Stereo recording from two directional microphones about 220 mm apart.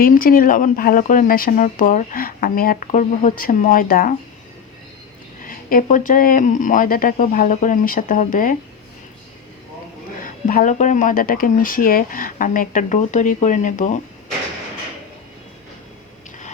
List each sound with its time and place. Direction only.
0.0 s speech: 40° left (ahead or behind)
5.4 s speech: 40° left (ahead or behind)
10.2 s speech: 35° left (ahead or behind)